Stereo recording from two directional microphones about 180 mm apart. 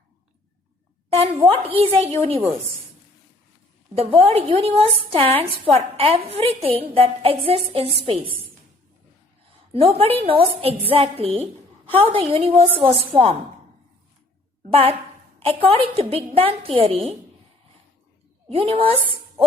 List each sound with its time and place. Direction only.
1.1 s a woman's voice: 35° right (ahead or behind)
3.9 s a woman's voice: 30° right (ahead or behind)
9.7 s a woman's voice: 35° right (ahead or behind)
14.7 s a woman's voice: 30° right (ahead or behind)
18.4 s a woman's voice: 30° right (ahead or behind)